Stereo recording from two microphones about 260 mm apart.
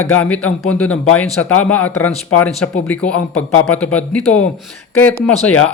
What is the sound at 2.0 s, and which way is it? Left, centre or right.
Speech, centre.